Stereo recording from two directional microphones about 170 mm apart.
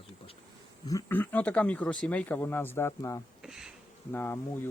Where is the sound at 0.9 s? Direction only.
15° left (ahead or behind).